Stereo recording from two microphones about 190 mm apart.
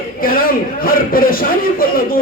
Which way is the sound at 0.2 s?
50° left (ahead or behind).